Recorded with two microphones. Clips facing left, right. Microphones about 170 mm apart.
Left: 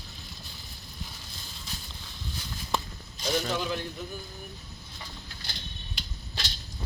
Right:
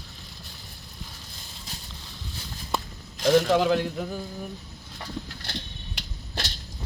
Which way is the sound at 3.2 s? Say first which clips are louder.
Right 10 dB; 90° right.